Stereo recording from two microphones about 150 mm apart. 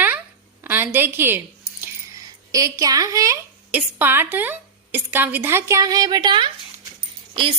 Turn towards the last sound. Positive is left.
turn(degrees=-35)  # may be behind; listen again after turning